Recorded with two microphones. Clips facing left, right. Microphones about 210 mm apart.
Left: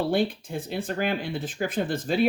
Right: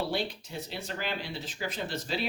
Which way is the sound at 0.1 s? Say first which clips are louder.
Left 8 dB; 50° left (ahead or behind).